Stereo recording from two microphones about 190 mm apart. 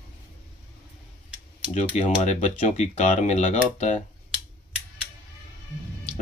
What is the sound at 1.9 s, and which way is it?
Speech, 40° left (ahead or behind).